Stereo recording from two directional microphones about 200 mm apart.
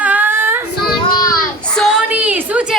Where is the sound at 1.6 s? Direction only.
5° left (ahead or behind).